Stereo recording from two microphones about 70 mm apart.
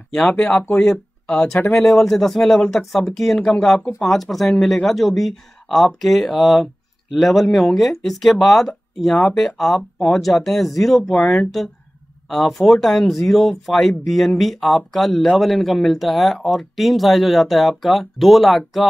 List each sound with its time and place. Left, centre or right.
0.3 s speech: centre
11.1 s speech: centre
12.3 s speech: centre